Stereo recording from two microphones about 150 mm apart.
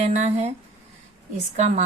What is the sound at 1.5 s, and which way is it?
Speech, 50° right (ahead or behind).